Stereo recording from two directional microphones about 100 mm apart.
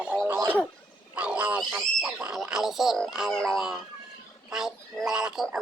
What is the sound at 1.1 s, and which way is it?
Wild animals, 15° right (ahead or behind).